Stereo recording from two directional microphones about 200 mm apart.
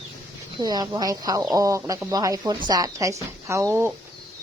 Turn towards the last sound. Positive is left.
turn(degrees=-15)  # may be behind; listen again after turning